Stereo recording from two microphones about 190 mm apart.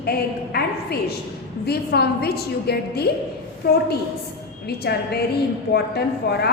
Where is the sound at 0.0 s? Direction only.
55° left (ahead or behind).